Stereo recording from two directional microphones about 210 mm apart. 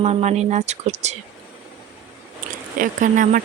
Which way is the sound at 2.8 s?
40° right (ahead or behind).